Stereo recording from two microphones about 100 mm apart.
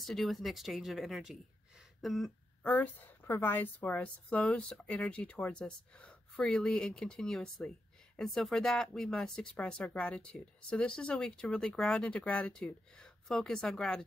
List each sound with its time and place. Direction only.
0.0 s speech: centre (ahead or behind)
2.0 s a sound: centre (ahead or behind)
2.6 s speech: 15° left (ahead or behind)